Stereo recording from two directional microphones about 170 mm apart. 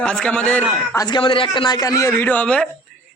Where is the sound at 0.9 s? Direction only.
20° left (ahead or behind).